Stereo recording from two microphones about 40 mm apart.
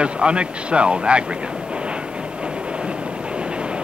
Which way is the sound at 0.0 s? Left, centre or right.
Right.